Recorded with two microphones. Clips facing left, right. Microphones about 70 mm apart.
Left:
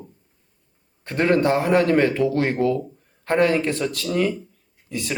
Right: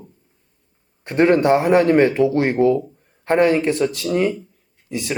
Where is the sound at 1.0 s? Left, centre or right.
Right.